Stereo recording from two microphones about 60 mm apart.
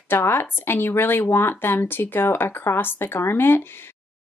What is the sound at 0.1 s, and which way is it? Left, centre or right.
Speech, left.